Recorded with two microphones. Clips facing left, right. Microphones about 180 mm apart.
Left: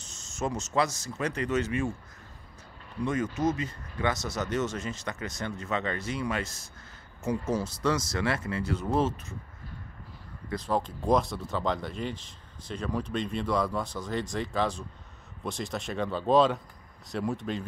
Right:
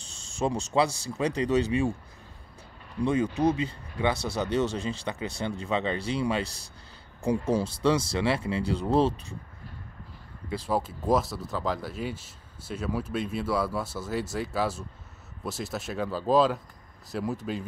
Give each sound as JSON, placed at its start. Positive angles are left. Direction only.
{"t": 0.1, "sound": "speech", "side_deg": -30}
{"t": 3.0, "sound": "speech", "side_deg": -30}
{"t": 10.5, "sound": "speech", "side_deg": -5}